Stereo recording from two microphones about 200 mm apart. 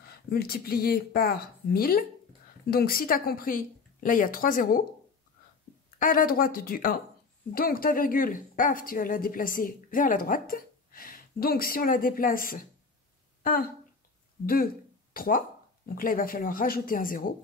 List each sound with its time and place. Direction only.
0.3 s speech: 50° left (ahead or behind)
5.9 s speech: 45° left (ahead or behind)
13.4 s a sound: 45° left (ahead or behind)
14.4 s speech: 50° left (ahead or behind)